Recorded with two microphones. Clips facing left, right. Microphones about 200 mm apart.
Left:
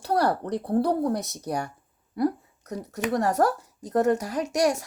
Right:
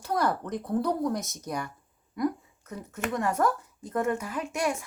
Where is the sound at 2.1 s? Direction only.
35° left (ahead or behind).